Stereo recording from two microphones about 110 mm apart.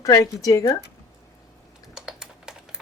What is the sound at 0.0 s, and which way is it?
Speech, 30° left (ahead or behind).